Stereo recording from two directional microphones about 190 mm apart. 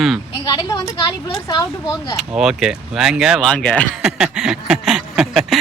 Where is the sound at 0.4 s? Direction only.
25° left (ahead or behind).